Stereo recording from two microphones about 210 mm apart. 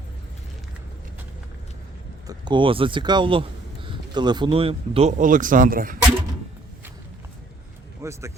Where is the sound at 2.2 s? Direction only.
20° right (ahead or behind); by 6.0 s 40° right (ahead or behind).